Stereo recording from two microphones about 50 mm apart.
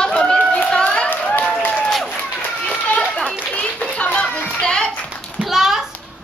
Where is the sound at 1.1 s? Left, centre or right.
Left.